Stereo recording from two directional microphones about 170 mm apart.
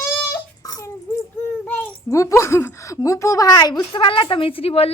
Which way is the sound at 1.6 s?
10° left (ahead or behind).